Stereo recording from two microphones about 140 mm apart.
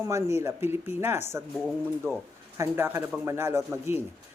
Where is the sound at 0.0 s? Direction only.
20° right (ahead or behind).